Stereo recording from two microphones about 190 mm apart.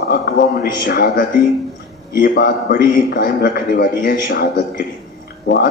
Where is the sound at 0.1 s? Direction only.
50° left (ahead or behind).